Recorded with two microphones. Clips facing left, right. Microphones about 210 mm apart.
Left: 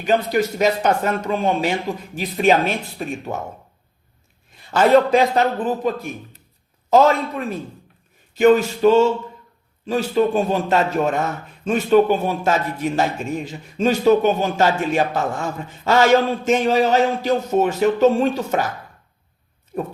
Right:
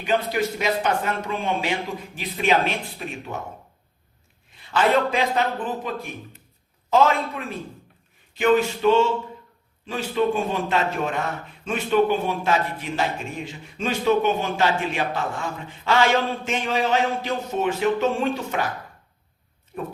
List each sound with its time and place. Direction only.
0.0 s a man's voice: 40° left (ahead or behind)
4.7 s a man's voice: 40° left (ahead or behind)
6.9 s a man's voice: 40° left (ahead or behind)
19.7 s a sound: 40° left (ahead or behind)